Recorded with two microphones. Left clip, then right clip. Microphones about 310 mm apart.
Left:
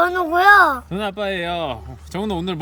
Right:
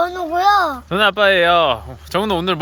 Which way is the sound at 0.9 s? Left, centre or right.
Centre.